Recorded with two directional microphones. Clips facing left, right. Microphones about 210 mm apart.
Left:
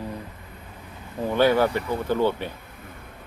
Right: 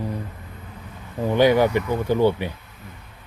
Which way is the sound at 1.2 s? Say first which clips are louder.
Right 3 dB; 15° right (ahead or behind).